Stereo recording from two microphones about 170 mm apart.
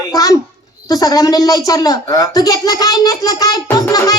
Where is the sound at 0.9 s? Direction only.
20° left (ahead or behind).